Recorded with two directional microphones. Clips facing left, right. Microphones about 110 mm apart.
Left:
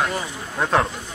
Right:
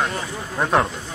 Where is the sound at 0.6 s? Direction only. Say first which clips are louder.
Right 1 dB; 5° right (ahead or behind).